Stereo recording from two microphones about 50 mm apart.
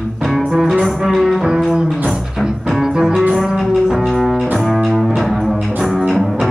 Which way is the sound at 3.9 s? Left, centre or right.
Centre.